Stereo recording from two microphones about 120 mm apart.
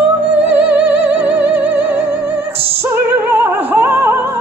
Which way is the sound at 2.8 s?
20° right (ahead or behind).